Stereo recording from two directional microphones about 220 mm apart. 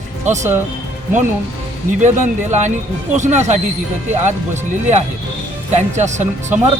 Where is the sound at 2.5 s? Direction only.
35° right (ahead or behind).